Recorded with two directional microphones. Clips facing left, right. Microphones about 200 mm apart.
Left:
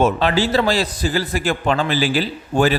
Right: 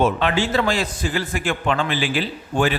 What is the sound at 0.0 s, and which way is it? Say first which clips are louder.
A man's voice: left 2 dB; 35° left (ahead or behind).